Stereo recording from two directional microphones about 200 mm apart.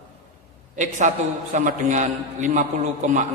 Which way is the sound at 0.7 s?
40° right (ahead or behind).